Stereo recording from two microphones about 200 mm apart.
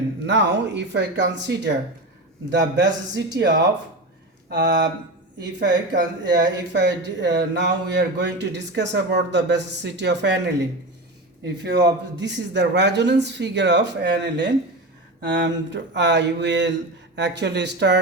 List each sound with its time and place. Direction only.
0.3 s speech: 60° right (ahead or behind)
4.4 s speech: 60° right (ahead or behind)
11.6 s speech: 60° right (ahead or behind)